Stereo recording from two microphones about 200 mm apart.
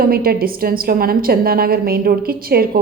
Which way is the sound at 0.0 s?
50° right (ahead or behind).